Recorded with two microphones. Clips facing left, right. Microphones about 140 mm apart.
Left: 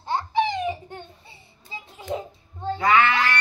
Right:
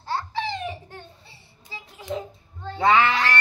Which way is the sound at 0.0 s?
20° left (ahead or behind).